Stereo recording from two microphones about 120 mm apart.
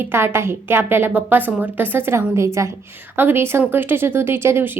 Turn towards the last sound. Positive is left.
turn(degrees=-20)  # may be behind; listen again after turning